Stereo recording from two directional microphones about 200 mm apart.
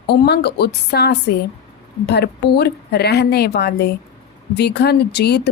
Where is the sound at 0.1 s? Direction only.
55° left (ahead or behind).